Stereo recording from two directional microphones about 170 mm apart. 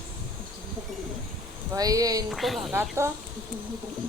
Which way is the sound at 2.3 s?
Centre (ahead or behind).